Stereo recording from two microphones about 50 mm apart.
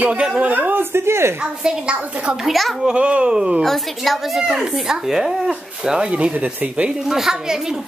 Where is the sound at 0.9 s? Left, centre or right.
Right.